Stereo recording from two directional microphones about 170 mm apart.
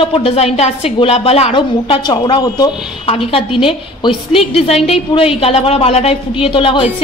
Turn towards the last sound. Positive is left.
turn(degrees=30)  # may be behind; listen again after turning